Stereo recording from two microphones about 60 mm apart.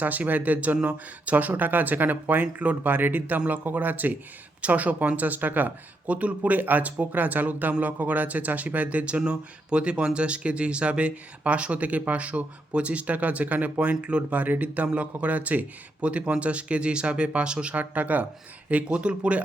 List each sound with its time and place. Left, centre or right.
0.0 s speech: right